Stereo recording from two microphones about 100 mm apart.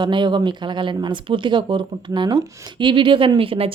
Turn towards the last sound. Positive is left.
turn(degrees=-70)  # may be behind; listen again after turning